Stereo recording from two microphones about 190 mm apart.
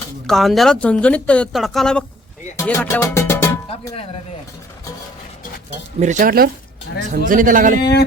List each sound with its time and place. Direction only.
0.3 s speech: centre (ahead or behind)
2.6 s music: 15° left (ahead or behind)
3.7 s speech: 30° left (ahead or behind)
6.0 s speech: 40° right (ahead or behind)